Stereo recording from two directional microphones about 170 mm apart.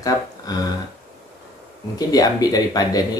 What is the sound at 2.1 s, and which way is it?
Speech, 20° left (ahead or behind).